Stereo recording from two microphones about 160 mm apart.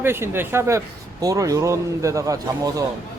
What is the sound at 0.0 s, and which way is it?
Speech, 15° right (ahead or behind).